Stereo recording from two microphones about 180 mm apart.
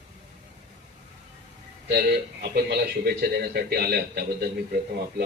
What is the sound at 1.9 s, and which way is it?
A man's voice, 65° right (ahead or behind).